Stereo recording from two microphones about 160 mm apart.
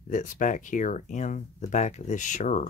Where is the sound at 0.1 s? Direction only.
55° left (ahead or behind).